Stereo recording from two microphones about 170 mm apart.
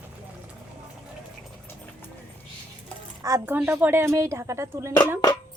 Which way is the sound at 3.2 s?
15° right (ahead or behind).